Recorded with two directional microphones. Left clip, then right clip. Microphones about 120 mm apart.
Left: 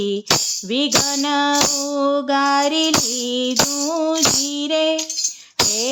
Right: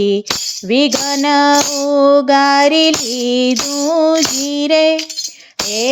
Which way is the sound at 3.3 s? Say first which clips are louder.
Right 6 dB; 30° right (ahead or behind).